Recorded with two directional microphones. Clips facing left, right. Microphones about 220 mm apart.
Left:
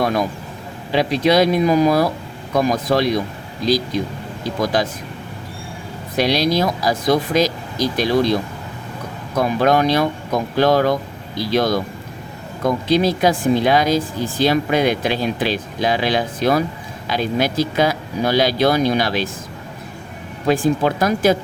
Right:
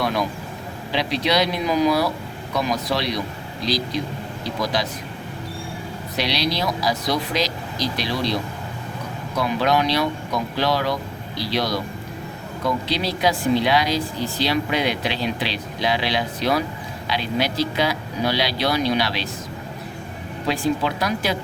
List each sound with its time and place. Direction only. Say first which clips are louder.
0.0 s vehicle: left 4 dB; 50° left (ahead or behind)
0.9 s speech: left 6 dB; 50° left (ahead or behind)
4.4 s speech: left 5 dB; 50° left (ahead or behind)
6.1 s speech: left 7 dB; 50° left (ahead or behind)
20.5 s speech: left 6 dB; 50° left (ahead or behind)